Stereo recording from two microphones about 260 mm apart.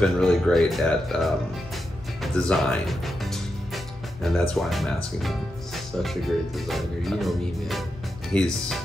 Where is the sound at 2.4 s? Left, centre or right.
Centre.